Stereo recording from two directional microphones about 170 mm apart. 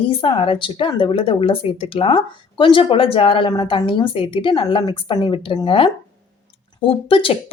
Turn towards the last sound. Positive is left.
turn(degrees=35)  # may be behind; listen again after turning